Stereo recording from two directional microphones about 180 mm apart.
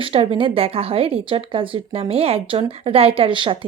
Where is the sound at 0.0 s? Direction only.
30° right (ahead or behind).